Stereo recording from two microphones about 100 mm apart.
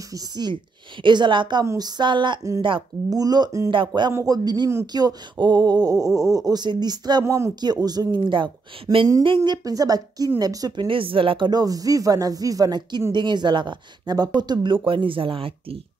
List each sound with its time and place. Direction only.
0.1 s a woman's voice: 45° right (ahead or behind)
3.1 s speech: 40° right (ahead or behind)
3.7 s a woman's voice: 50° right (ahead or behind)
4.1 s a woman's voice: 35° right (ahead or behind)
10.9 s a woman's voice: 60° right (ahead or behind)